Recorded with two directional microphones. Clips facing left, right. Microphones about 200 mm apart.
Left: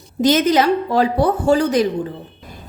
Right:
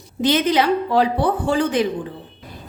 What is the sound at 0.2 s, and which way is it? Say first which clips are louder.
A woman's voice: left 3 dB; 45° left (ahead or behind).